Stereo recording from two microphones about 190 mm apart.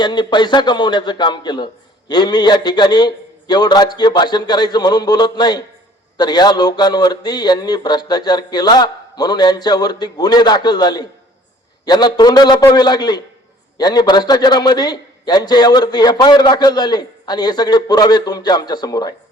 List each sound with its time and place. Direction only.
0.0 s a man's voice: 25° left (ahead or behind)